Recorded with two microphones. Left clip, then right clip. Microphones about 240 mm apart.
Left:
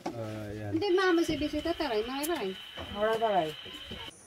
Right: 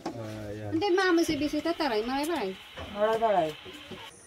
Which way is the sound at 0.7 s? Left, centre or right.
Right.